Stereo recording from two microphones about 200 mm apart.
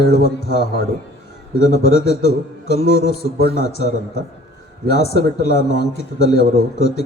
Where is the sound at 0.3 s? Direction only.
55° left (ahead or behind).